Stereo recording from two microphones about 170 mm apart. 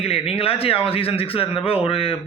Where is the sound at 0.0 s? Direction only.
35° left (ahead or behind).